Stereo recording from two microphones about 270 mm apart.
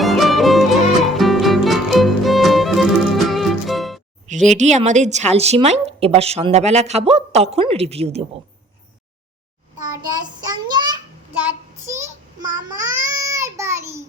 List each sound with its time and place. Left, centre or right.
0.0 s music: centre
4.3 s a woman's voice: right
10.7 s child singing: centre